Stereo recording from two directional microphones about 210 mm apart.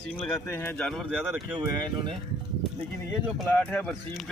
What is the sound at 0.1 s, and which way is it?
Speech, 10° left (ahead or behind).